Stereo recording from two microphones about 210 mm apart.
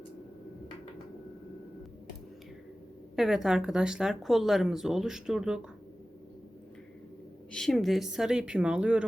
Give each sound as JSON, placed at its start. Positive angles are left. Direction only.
{"t": 3.2, "sound": "speech", "side_deg": 0}
{"t": 7.5, "sound": "speech", "side_deg": 0}